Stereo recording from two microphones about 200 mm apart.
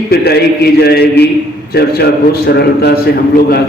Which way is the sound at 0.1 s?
55° left (ahead or behind).